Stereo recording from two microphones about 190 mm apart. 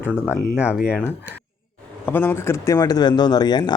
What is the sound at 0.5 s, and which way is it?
Speech, 5° right (ahead or behind).